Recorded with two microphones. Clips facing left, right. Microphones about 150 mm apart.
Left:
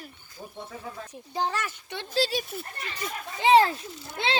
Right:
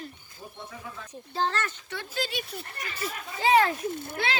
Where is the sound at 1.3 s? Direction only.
15° left (ahead or behind).